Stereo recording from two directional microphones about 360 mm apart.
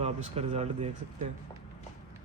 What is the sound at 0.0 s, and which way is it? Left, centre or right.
Speech, centre.